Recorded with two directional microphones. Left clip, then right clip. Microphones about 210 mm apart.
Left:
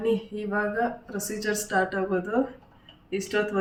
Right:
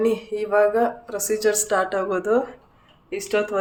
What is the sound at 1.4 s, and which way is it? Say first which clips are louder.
Speech: right 4 dB; 55° right (ahead or behind).